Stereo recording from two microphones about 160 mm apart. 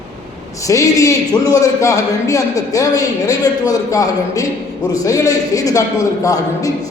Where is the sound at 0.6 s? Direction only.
20° left (ahead or behind).